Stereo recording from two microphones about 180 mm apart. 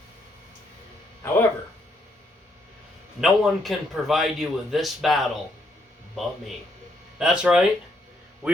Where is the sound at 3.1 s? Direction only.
Centre (ahead or behind).